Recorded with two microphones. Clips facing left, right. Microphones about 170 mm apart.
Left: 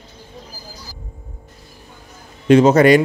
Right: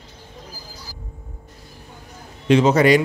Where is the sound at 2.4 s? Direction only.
50° left (ahead or behind).